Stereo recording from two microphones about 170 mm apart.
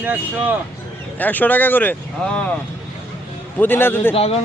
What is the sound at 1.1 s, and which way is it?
Speech, 10° left (ahead or behind).